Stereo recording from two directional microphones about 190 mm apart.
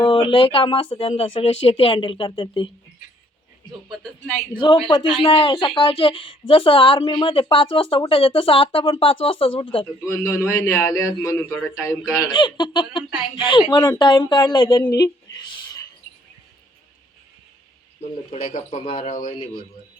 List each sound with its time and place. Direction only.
0.0 s a woman's voice: 25° left (ahead or behind)
4.5 s a woman's voice: 25° left (ahead or behind)
10.1 s a man's voice: 15° left (ahead or behind)
14.8 s a sound: 20° left (ahead or behind)
18.0 s speech: 30° left (ahead or behind)